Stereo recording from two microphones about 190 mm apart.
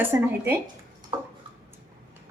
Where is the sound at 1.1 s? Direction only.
20° right (ahead or behind).